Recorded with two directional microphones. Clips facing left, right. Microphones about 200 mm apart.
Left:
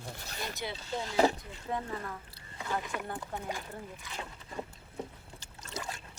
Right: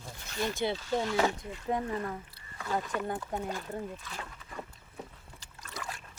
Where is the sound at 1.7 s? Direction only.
15° right (ahead or behind).